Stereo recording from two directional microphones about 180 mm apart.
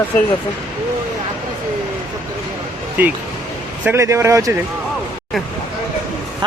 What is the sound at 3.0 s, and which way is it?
Speech, 10° right (ahead or behind).